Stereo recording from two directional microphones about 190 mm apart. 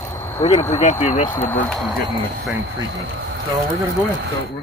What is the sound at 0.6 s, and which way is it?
Speech, 35° left (ahead or behind).